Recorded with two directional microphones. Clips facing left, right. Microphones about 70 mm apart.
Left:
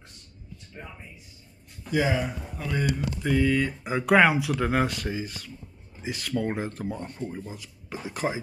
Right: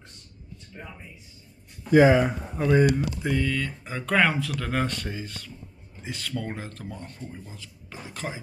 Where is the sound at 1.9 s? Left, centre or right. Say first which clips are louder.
Right 8 dB; right.